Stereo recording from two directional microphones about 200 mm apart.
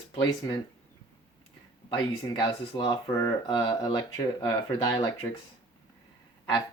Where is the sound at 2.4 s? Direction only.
25° left (ahead or behind).